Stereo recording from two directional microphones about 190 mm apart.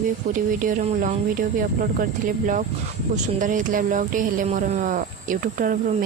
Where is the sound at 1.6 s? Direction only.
45° right (ahead or behind).